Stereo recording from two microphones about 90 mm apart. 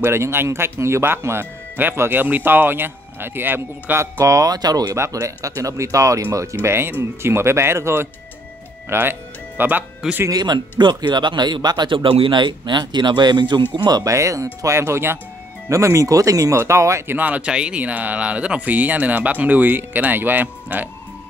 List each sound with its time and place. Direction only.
0.0 s speech: 25° right (ahead or behind); by 4.9 s 45° right (ahead or behind)
4.9 s speech: 35° right (ahead or behind)
10.3 s speech: 55° right (ahead or behind)
13.8 s speech: 45° right (ahead or behind)
14.1 s speech: 35° right (ahead or behind)
17.2 s speech: 15° right (ahead or behind)